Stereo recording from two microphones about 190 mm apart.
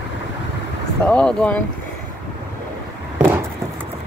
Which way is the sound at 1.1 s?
5° left (ahead or behind).